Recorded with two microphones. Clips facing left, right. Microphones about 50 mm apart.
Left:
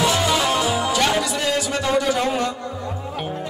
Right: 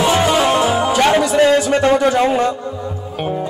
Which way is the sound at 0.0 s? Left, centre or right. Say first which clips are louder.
Right 5 dB; right.